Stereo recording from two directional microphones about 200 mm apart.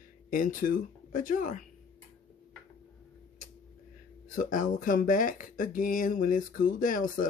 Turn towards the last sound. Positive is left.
turn(degrees=45)  # may be behind; listen again after turning